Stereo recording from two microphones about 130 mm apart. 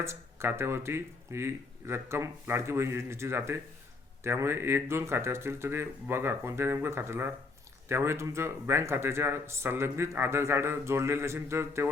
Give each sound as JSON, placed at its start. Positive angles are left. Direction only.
{"t": 0.0, "sound": "speech", "side_deg": -20}